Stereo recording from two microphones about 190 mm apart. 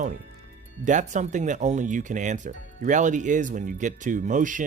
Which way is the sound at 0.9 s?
40° right (ahead or behind).